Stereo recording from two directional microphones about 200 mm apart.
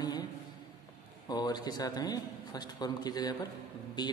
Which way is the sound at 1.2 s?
20° left (ahead or behind).